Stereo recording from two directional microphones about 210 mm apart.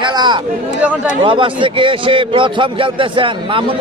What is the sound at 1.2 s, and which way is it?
A man's voice, 25° right (ahead or behind).